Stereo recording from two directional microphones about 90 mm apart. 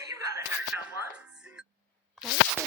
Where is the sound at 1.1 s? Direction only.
10° right (ahead or behind).